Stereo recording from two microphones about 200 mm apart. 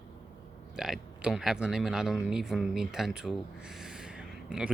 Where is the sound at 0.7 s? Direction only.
5° right (ahead or behind).